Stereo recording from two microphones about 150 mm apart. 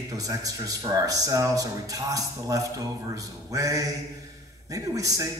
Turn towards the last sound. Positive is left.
turn(degrees=-25)  # may be behind; listen again after turning